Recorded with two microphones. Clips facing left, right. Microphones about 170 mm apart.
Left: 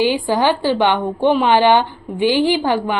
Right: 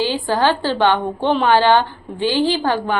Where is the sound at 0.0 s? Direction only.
15° left (ahead or behind).